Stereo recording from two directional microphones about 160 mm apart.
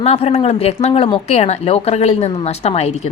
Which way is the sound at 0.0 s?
45° left (ahead or behind).